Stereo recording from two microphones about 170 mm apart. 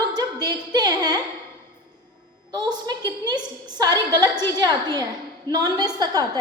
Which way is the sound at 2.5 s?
25° right (ahead or behind).